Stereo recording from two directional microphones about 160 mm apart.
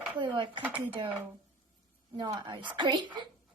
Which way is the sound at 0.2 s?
30° right (ahead or behind).